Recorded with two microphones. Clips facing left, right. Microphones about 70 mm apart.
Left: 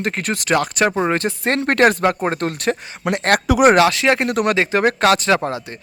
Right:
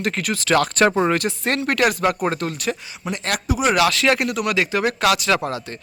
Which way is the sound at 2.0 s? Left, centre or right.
Left.